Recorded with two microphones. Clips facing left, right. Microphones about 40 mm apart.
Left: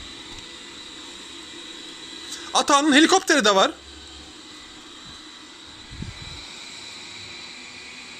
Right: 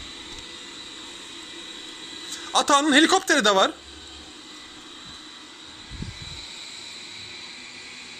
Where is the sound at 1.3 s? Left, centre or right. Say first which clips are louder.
Even; centre.